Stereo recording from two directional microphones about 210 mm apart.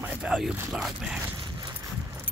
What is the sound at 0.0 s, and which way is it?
Speech, 5° right (ahead or behind).